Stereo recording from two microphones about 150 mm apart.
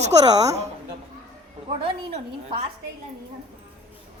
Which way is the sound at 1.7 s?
40° right (ahead or behind).